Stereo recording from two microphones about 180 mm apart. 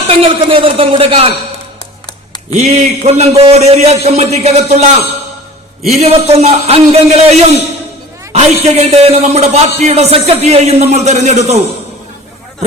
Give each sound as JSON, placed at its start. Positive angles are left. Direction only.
{"t": 0.1, "sound": "a man's voice", "side_deg": -30}
{"t": 2.5, "sound": "a man's voice", "side_deg": -35}